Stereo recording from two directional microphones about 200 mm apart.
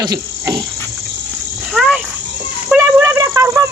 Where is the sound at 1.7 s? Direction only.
5° right (ahead or behind).